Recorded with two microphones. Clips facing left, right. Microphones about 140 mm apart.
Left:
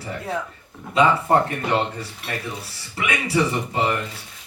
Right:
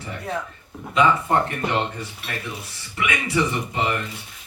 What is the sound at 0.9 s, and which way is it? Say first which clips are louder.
Speech: left 1 dB; 30° left (ahead or behind).